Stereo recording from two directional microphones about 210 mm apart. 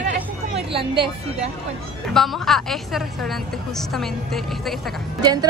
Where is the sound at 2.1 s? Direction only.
Centre (ahead or behind).